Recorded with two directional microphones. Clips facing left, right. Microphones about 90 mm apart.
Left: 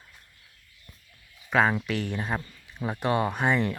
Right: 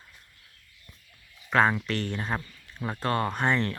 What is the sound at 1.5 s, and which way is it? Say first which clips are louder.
Speech: even; 5° left (ahead or behind).